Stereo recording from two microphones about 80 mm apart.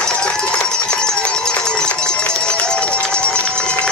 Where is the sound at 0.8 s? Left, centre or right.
Centre.